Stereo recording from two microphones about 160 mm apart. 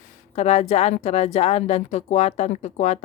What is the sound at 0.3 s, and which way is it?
A woman's voice, 40° left (ahead or behind).